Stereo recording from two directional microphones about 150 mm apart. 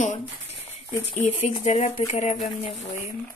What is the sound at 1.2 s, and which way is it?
Speech, 50° left (ahead or behind).